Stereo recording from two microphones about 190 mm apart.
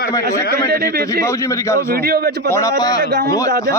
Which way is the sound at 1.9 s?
55° right (ahead or behind).